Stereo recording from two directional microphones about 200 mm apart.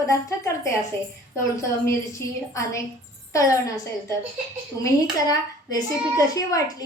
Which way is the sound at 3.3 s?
15° left (ahead or behind).